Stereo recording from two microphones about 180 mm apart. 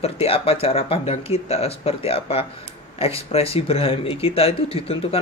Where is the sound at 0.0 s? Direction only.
35° left (ahead or behind).